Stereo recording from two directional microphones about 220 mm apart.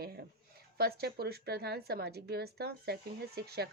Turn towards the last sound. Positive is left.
turn(degrees=-45)  # may be behind; listen again after turning